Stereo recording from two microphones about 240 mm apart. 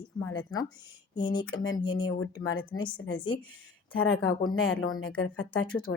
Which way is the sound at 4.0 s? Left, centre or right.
Left.